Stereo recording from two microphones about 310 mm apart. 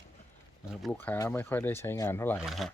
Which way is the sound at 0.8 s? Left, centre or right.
Centre.